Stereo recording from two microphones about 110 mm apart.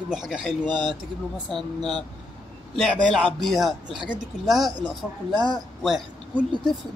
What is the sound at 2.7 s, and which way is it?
Speech, 5° left (ahead or behind).